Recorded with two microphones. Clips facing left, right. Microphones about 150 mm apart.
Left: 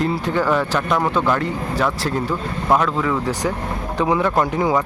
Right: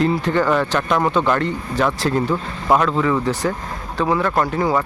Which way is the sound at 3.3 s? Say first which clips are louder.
Even; 15° left (ahead or behind).